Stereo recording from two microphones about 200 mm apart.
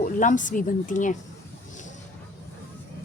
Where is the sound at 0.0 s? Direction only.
40° left (ahead or behind).